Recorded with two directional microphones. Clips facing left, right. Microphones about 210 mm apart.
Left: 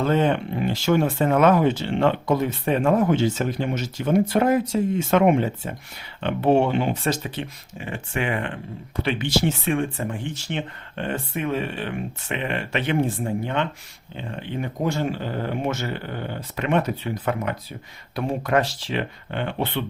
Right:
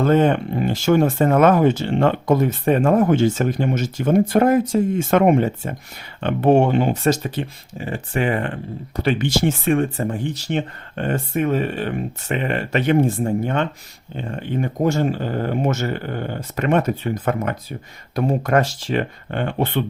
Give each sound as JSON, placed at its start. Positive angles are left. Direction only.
{"t": 0.0, "sound": "speech", "side_deg": -50}